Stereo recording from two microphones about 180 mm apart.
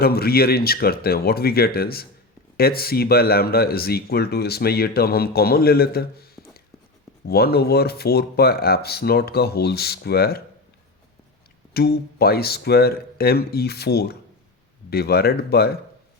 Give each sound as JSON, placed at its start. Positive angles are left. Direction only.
{"t": 0.0, "sound": "speech", "side_deg": 60}
{"t": 11.7, "sound": "speech", "side_deg": 60}